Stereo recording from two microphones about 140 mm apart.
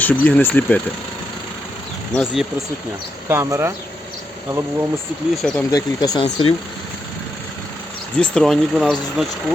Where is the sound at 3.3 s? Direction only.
20° right (ahead or behind).